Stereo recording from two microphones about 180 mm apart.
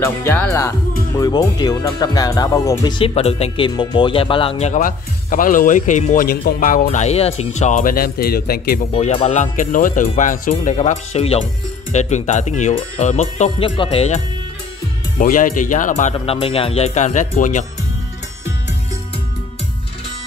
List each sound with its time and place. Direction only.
0.0 s speech: 10° left (ahead or behind); by 8.8 s 55° left (ahead or behind)
8.9 s speech: 35° left (ahead or behind)
15.1 s speech: 50° left (ahead or behind)